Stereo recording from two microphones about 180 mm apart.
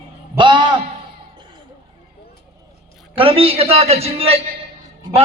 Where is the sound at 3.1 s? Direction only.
30° right (ahead or behind).